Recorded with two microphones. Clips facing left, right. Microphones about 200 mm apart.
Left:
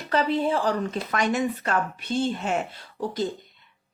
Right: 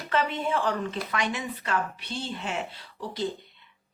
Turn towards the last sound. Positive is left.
turn(degrees=45)  # may be behind; listen again after turning